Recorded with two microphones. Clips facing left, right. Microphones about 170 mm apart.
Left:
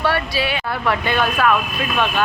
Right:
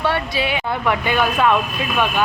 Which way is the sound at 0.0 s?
20° right (ahead or behind).